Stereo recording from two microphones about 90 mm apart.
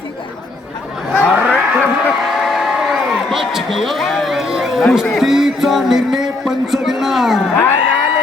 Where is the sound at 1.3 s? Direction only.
15° right (ahead or behind).